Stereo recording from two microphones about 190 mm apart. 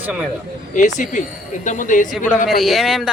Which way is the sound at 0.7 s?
40° left (ahead or behind).